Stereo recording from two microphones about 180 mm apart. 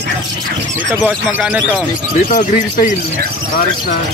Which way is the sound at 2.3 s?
45° left (ahead or behind).